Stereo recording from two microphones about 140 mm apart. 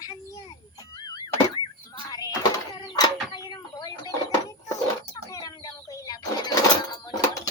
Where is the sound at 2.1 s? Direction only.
25° left (ahead or behind).